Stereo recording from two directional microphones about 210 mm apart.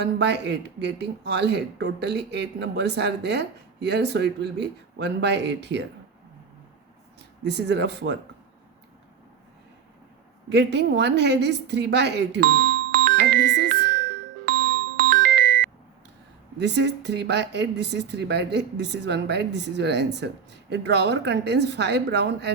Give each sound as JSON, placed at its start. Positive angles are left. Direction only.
{"t": 0.0, "sound": "speech", "side_deg": -55}
{"t": 7.2, "sound": "speech", "side_deg": -55}
{"t": 10.5, "sound": "a sound", "side_deg": -55}
{"t": 16.6, "sound": "speech", "side_deg": -55}